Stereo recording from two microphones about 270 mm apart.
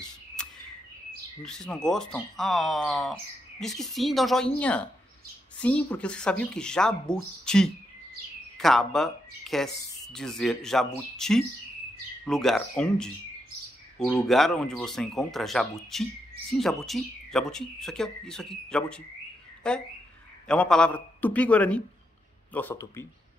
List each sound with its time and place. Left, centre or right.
1.4 s speech: centre